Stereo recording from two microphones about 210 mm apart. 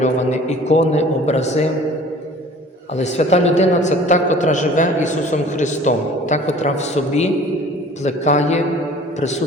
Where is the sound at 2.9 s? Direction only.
30° left (ahead or behind).